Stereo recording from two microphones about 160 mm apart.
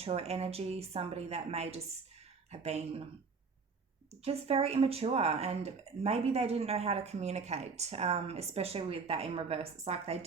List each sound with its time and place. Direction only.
0.0 s speech: 40° right (ahead or behind)
4.1 s speech: 40° right (ahead or behind)